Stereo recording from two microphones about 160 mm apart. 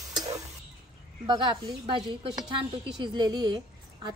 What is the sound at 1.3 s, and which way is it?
A woman's voice, 30° right (ahead or behind).